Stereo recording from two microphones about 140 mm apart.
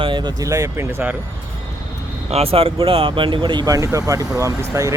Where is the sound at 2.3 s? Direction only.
45° right (ahead or behind).